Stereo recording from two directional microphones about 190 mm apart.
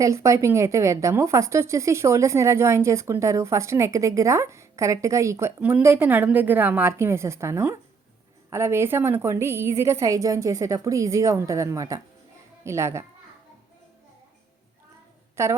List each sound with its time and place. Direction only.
0.0 s a woman's voice: 15° right (ahead or behind)
15.4 s a woman's voice: 15° right (ahead or behind)